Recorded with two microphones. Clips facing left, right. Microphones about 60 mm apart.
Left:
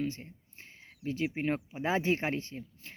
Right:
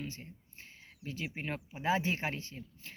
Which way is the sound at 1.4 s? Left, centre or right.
Left.